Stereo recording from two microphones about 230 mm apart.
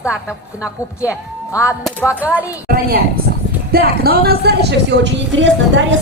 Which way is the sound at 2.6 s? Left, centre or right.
Right.